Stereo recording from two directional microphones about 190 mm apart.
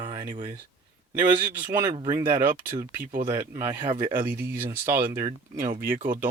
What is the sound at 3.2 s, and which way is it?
Speech, 15° right (ahead or behind).